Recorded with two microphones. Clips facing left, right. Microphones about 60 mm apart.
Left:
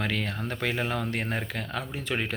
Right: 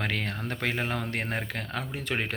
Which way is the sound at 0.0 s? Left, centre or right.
Right.